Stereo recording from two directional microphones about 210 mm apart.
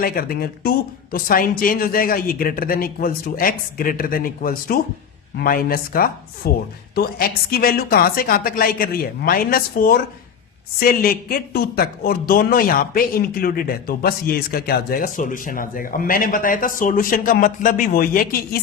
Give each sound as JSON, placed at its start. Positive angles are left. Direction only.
{"t": 0.0, "sound": "speech", "side_deg": 45}